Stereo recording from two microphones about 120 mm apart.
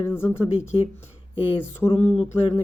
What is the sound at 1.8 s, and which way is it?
Speech, 20° left (ahead or behind).